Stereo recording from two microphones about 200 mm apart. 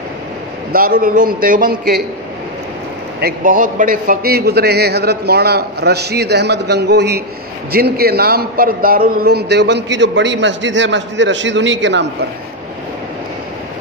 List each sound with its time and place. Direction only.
0.7 s a man's voice: 45° right (ahead or behind)
3.2 s a man's voice: 45° right (ahead or behind); by 12.1 s 65° right (ahead or behind)